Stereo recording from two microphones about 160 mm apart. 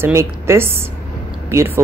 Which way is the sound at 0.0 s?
15° right (ahead or behind).